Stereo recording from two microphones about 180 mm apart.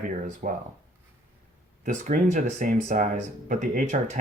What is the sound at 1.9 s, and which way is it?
Speech, 40° right (ahead or behind).